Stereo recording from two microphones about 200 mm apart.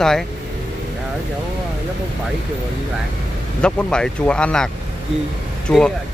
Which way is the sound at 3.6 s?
5° left (ahead or behind).